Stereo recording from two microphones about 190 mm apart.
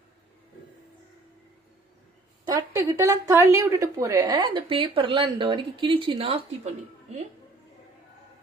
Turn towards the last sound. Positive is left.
turn(degrees=-30)  # may be behind; listen again after turning